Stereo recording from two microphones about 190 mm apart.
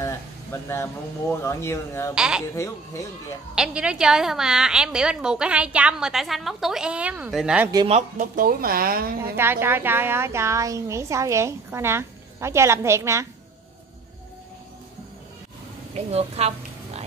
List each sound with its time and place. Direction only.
0.0 s a sound: 15° left (ahead or behind)
1.3 s speech: 15° left (ahead or behind)
2.1 s a woman's voice: 5° right (ahead or behind)
2.5 s speech: 15° left (ahead or behind)
3.5 s a woman's voice: 5° right (ahead or behind)
7.7 s speech: 25° right (ahead or behind)
8.2 s speech: 45° right (ahead or behind)
9.2 s a woman's voice: 10° right (ahead or behind)
15.9 s speech: 35° right (ahead or behind)